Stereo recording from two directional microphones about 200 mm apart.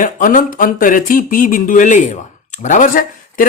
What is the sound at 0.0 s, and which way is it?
Speech, 40° left (ahead or behind).